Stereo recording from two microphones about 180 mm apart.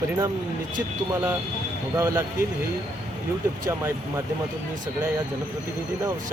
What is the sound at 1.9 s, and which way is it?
Speech, 15° right (ahead or behind).